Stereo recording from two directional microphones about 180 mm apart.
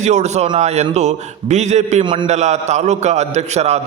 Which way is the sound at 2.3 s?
40° right (ahead or behind).